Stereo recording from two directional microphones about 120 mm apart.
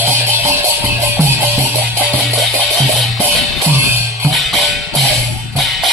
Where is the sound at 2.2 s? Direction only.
Centre (ahead or behind).